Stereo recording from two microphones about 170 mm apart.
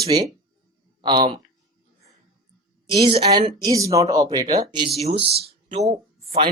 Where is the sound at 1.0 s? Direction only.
25° right (ahead or behind).